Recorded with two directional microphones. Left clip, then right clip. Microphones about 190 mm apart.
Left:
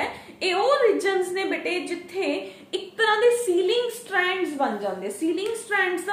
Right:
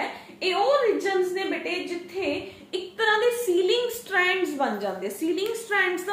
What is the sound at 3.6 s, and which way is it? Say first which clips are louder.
A woman's voice: even; 10° left (ahead or behind).